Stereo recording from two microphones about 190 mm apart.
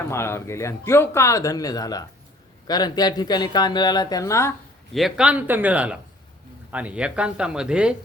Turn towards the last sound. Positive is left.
turn(degrees=-5)  # may be behind; listen again after turning